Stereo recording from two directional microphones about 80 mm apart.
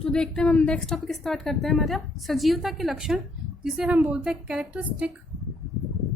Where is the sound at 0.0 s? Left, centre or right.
Centre.